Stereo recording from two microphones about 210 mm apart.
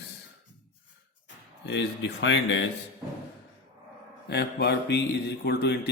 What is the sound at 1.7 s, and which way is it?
Speech, 55° left (ahead or behind).